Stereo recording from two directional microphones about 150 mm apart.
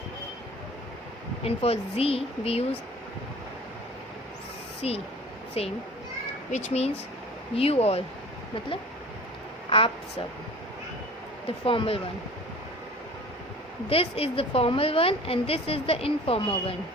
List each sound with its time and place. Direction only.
1.5 s a woman's voice: 40° left (ahead or behind)
4.8 s a woman's voice: 40° left (ahead or behind)
9.6 s a woman's voice: 35° left (ahead or behind)
11.4 s a woman's voice: 35° left (ahead or behind)
13.9 s a woman's voice: 40° left (ahead or behind)